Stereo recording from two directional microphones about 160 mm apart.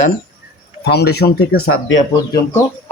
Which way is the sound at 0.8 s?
90° left.